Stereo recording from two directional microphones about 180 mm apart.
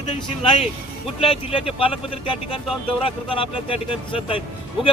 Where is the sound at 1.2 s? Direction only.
30° left (ahead or behind).